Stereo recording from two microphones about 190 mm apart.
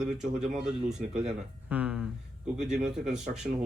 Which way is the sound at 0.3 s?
5° right (ahead or behind).